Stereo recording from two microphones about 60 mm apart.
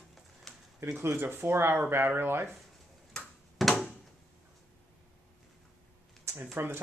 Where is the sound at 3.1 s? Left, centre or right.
Centre.